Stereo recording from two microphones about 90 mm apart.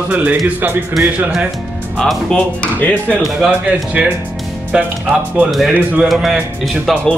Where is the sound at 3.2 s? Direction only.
10° right (ahead or behind).